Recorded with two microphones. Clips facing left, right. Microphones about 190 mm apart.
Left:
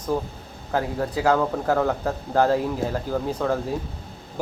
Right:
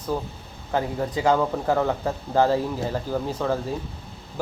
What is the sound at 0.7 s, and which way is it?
Speech, 5° left (ahead or behind).